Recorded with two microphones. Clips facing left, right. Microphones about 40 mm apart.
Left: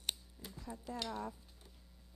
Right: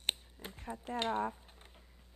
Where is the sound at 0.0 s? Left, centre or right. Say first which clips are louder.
Right 5 dB; right.